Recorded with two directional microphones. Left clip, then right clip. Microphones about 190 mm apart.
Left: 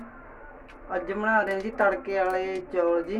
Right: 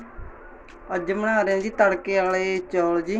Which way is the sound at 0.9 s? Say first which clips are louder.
Right 2 dB; 20° right (ahead or behind).